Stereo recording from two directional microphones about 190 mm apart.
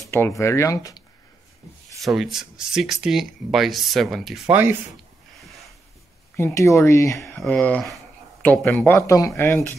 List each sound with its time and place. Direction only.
0.0 s a sound: 15° left (ahead or behind)
0.4 s speech: 15° left (ahead or behind)
2.0 s speech: centre (ahead or behind)
6.3 s speech: 15° left (ahead or behind)